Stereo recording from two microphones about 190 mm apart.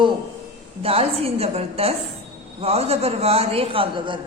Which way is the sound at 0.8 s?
30° right (ahead or behind).